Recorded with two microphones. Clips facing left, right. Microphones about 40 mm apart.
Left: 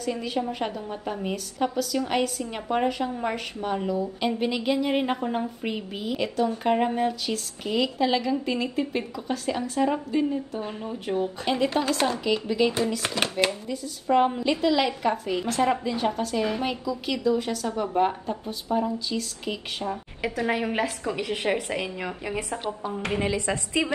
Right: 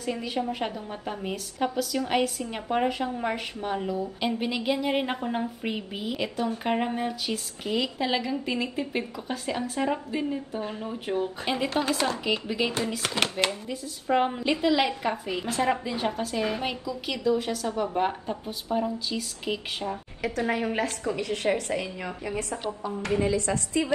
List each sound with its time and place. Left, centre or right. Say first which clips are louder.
0.0 s a woman's voice: left 2 dB; centre
20.2 s a woman's voice: left 1 dB; left
21.0 s a woman's voice: even; left